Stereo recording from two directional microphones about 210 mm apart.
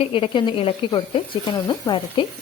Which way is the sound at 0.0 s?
25° left (ahead or behind).